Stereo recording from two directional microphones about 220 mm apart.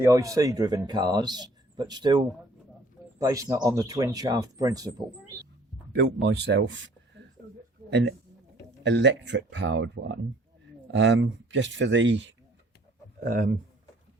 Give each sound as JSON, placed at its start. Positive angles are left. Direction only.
{"t": 0.0, "sound": "speech", "side_deg": -15}
{"t": 5.9, "sound": "speech", "side_deg": -50}
{"t": 13.1, "sound": "speech", "side_deg": -40}